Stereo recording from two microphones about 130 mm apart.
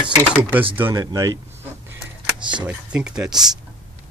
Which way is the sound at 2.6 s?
10° right (ahead or behind).